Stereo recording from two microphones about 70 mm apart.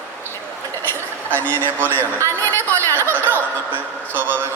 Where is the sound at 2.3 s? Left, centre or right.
Left.